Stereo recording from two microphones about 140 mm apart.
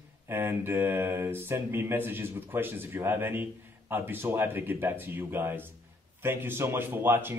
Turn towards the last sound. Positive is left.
turn(degrees=-15)  # may be behind; listen again after turning